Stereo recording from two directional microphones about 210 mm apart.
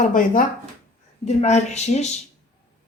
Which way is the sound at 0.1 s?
40° left (ahead or behind).